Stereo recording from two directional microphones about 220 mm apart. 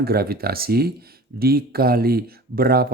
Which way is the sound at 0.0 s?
45° right (ahead or behind).